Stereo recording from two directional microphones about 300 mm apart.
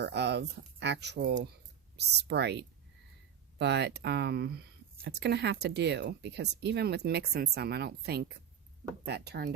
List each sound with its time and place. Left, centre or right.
0.0 s speech: right